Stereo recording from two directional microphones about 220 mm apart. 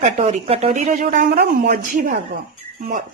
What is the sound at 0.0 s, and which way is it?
Speech, 30° right (ahead or behind).